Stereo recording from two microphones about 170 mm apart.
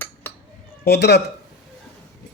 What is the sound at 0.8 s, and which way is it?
Speech, 75° left (ahead or behind).